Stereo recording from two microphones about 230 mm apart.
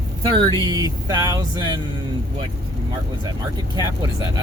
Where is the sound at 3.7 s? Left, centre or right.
Centre.